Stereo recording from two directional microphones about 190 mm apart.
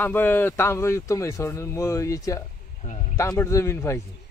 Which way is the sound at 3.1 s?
15° left (ahead or behind).